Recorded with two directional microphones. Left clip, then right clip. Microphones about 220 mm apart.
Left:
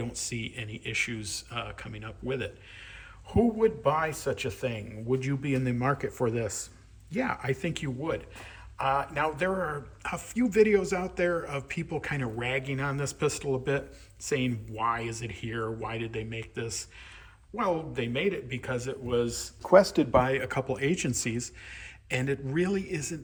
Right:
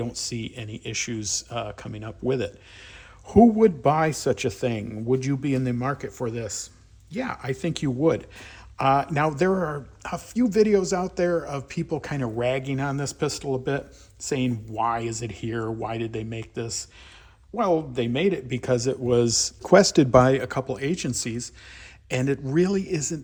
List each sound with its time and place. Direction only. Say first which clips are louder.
0.0 s speech: right 5 dB; 10° right (ahead or behind); by 9.5 s 30° right (ahead or behind)
9.6 s speech: right 4 dB; 15° right (ahead or behind)
20.2 s speech: right 6 dB; 15° right (ahead or behind)